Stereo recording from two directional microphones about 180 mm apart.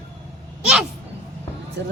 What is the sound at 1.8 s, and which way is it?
Speech, 80° right.